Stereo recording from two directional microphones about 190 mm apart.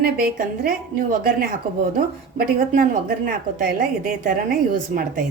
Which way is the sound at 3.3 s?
50° right (ahead or behind).